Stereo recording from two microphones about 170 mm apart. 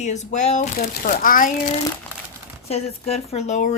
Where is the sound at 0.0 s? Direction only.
45° left (ahead or behind).